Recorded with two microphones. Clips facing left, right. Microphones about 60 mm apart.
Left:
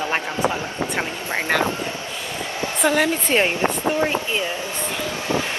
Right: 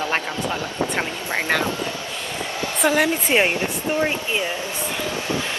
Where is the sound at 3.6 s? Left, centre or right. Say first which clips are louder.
Left 2 dB; left.